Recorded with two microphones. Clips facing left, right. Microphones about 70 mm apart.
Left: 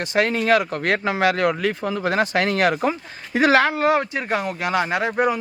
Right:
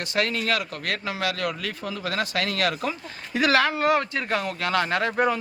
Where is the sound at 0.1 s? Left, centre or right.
Left.